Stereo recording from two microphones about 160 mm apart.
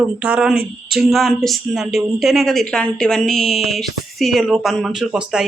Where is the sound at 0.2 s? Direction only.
5° right (ahead or behind).